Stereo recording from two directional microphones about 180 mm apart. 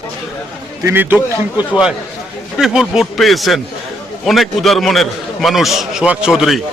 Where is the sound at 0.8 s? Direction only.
10° right (ahead or behind).